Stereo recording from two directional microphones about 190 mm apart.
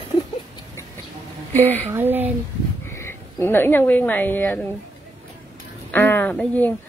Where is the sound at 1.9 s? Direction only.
10° right (ahead or behind).